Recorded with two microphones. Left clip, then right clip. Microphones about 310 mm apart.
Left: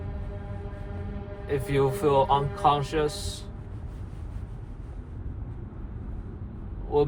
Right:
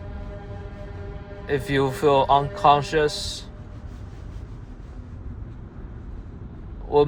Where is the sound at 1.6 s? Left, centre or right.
Right.